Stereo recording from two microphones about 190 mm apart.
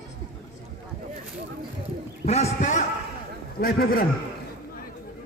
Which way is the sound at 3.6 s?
50° left (ahead or behind).